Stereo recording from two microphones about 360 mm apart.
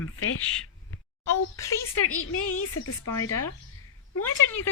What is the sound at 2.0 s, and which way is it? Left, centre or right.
A woman's voice, left.